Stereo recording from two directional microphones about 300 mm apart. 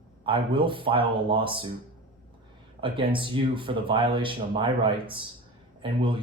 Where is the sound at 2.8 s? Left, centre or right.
Centre.